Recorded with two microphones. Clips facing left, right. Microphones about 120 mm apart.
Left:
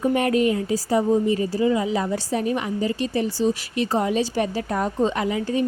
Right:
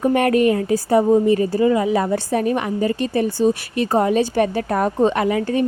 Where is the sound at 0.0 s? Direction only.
60° right (ahead or behind).